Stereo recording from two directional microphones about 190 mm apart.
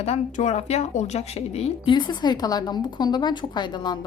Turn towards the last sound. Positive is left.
turn(degrees=20)  # may be behind; listen again after turning